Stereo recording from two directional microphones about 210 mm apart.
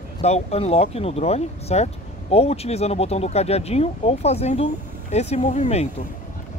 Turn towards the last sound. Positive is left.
turn(degrees=30)  # may be behind; listen again after turning